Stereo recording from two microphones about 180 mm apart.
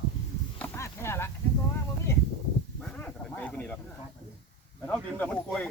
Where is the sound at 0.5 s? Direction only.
10° left (ahead or behind).